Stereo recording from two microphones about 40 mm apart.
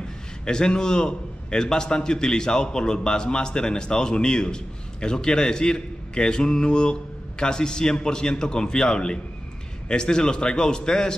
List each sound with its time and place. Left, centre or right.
0.5 s a man's voice: centre